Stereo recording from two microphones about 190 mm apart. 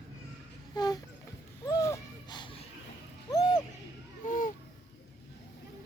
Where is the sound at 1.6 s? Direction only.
20° left (ahead or behind).